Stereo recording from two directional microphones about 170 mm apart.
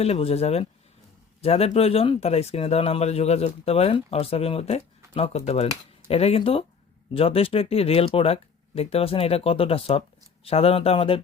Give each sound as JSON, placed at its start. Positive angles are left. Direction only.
{"t": 0.0, "sound": "speech", "side_deg": 35}